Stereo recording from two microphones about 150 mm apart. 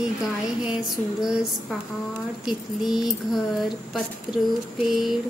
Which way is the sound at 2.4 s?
Centre (ahead or behind).